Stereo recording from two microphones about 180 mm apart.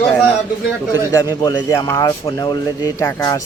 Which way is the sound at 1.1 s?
20° left (ahead or behind).